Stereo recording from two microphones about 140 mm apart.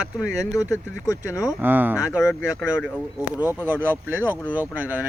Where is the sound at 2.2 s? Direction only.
20° left (ahead or behind).